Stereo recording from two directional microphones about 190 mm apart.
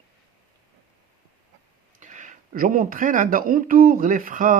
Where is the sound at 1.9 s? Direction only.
40° right (ahead or behind).